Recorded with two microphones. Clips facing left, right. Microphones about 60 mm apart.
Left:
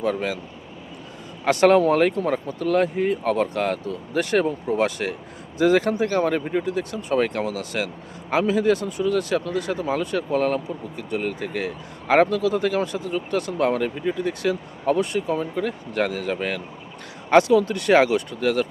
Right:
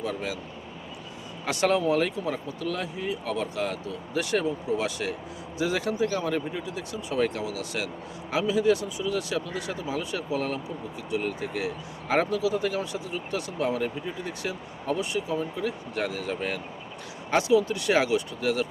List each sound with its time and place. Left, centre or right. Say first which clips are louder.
0.0 s speech: left 7 dB; left
1.5 s speech: left 8 dB; left